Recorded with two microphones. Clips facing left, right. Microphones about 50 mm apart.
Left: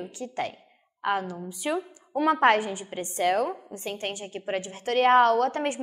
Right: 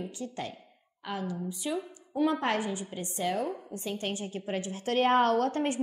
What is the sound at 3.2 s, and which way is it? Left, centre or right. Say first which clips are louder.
Speech: left 7 dB; left.